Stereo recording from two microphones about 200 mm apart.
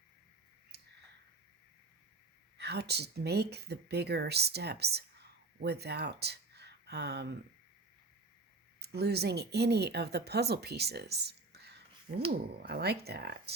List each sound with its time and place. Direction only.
0.7 s a sound: 55° right (ahead or behind)
2.6 s speech: 55° right (ahead or behind)
8.8 s speech: 55° right (ahead or behind)